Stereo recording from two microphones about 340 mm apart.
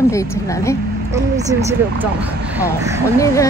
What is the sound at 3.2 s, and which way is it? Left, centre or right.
Speech, centre.